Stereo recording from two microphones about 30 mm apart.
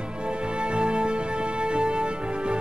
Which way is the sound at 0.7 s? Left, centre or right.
Right.